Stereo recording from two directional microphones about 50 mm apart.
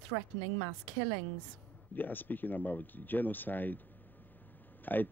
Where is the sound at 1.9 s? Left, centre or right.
Left.